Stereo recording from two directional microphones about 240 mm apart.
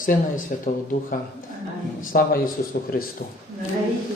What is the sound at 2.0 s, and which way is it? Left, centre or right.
Speech, left.